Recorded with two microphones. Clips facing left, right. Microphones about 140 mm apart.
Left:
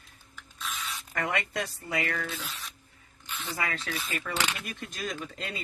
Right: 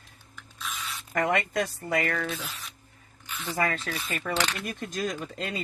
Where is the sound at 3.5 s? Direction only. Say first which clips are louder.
Right 5 dB; 45° right (ahead or behind).